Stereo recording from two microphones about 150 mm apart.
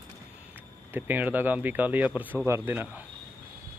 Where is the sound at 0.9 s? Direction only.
10° right (ahead or behind).